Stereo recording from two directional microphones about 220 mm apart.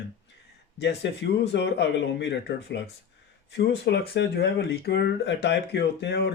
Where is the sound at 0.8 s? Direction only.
50° left (ahead or behind).